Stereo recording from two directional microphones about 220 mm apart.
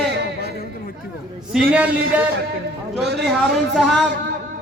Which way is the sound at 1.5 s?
5° right (ahead or behind).